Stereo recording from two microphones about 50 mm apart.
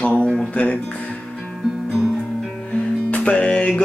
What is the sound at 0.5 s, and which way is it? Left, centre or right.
Speech, left.